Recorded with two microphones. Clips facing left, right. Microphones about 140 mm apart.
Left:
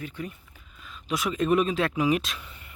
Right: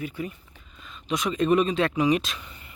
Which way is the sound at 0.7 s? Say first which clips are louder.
Right 1 dB; 5° left (ahead or behind).